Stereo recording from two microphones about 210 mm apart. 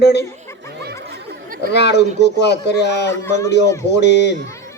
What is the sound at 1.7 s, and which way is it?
A man's voice, 55° left (ahead or behind).